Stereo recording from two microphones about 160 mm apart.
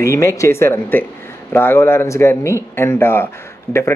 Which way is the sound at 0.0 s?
20° left (ahead or behind).